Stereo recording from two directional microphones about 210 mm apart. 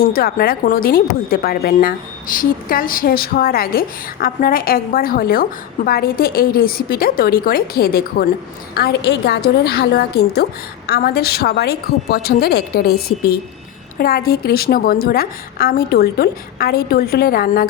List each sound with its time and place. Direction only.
0.0 s a woman's voice: 45° left (ahead or behind)